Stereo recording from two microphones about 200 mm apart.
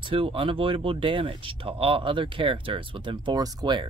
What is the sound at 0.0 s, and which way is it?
Speech, 25° right (ahead or behind).